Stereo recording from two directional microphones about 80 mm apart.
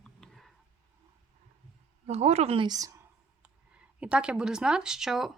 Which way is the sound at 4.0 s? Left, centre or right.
Centre.